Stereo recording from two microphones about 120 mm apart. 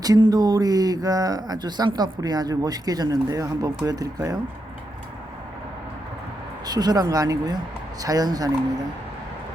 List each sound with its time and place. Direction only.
0.0 s speech: 30° right (ahead or behind)
6.7 s speech: 35° right (ahead or behind)